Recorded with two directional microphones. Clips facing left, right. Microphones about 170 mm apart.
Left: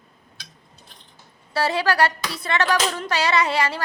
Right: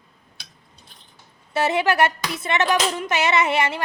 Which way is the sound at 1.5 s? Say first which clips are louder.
Right 1 dB; 20° right (ahead or behind).